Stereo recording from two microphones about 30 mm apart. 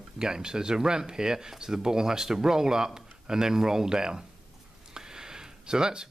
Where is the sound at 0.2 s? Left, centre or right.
Right.